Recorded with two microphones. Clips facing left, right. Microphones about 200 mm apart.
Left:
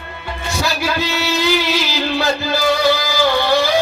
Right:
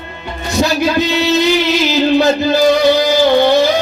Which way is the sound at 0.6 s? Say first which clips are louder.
Right 8 dB; 20° right (ahead or behind).